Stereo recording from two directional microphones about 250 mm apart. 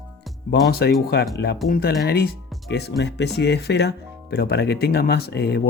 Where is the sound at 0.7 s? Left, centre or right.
Left.